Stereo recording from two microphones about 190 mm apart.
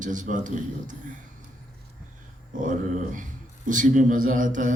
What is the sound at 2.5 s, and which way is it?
Speech, 40° right (ahead or behind).